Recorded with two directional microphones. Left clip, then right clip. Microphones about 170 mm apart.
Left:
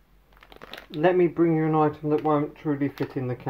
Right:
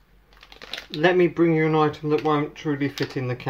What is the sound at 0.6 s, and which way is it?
Crumpling, 20° left (ahead or behind).